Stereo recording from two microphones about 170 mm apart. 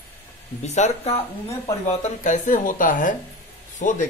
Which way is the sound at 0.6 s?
40° left (ahead or behind).